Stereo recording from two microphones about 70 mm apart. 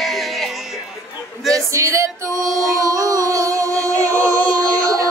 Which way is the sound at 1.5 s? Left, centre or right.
Right.